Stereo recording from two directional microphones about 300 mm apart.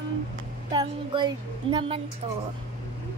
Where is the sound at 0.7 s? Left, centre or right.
Centre.